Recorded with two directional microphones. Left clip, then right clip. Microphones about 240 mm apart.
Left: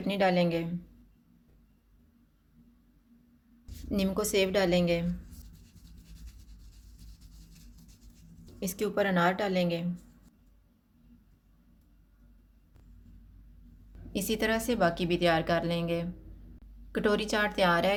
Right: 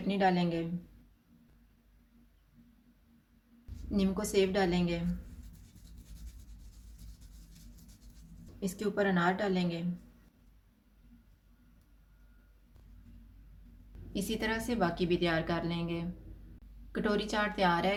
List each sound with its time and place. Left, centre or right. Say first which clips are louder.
0.1 s a woman's voice: left 3 dB; left
3.9 s a woman's voice: left 2 dB; left
8.6 s a woman's voice: left 3 dB; left
14.1 s a woman's voice: left 5 dB; left